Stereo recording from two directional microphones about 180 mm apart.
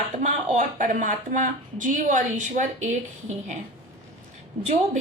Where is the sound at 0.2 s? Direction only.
45° right (ahead or behind).